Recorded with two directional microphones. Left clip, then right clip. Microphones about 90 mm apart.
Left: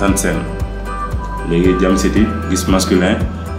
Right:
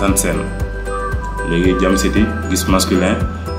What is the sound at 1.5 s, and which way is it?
Speech, 20° right (ahead or behind).